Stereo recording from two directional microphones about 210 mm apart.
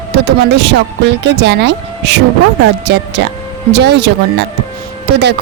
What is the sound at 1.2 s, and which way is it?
Speech, 55° right (ahead or behind).